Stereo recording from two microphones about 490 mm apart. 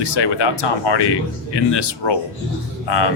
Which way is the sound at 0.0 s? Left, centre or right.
Left.